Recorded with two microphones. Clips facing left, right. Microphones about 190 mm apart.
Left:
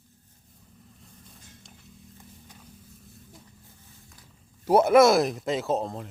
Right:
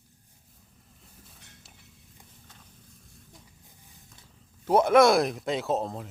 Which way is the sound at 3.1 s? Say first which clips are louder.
Left 4 dB; centre (ahead or behind).